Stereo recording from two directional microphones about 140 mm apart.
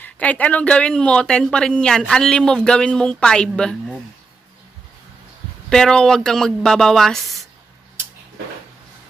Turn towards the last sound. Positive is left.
turn(degrees=0)  # may be behind; listen again after turning